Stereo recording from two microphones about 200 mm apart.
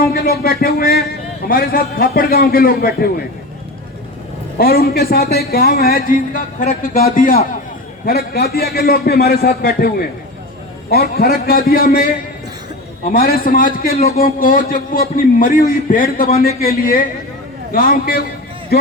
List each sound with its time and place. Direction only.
0.0 s a man's voice: 50° left (ahead or behind)
4.5 s a man's voice: 50° left (ahead or behind)